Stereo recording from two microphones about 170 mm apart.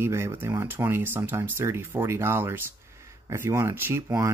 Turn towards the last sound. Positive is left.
turn(degrees=-15)  # may be behind; listen again after turning